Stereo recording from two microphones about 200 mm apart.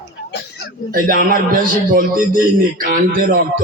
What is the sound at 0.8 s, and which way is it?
A man's voice, 45° right (ahead or behind).